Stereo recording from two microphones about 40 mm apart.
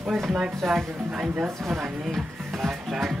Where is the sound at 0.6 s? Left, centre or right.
Centre.